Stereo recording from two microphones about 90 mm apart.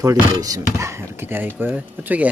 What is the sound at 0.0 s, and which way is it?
Speech, 40° right (ahead or behind).